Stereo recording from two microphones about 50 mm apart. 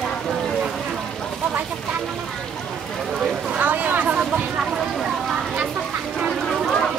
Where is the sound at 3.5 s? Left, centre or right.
Right.